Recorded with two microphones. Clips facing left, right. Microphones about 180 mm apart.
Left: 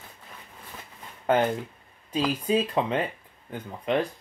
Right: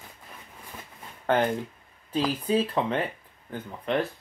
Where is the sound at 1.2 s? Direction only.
10° left (ahead or behind).